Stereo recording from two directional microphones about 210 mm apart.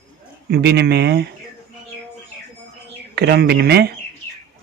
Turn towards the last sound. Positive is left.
turn(degrees=-50)  # may be behind; listen again after turning